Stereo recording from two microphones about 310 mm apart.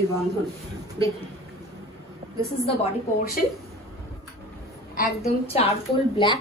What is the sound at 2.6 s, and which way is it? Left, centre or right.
Speech, left.